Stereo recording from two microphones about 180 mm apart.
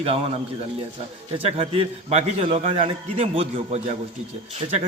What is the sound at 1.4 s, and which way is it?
A man's voice, 35° right (ahead or behind).